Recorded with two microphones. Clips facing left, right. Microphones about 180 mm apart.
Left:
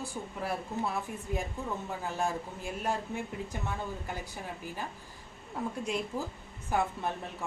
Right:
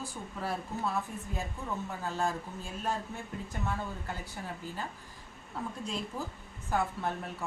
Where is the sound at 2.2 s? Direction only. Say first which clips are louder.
Even; 10° left (ahead or behind).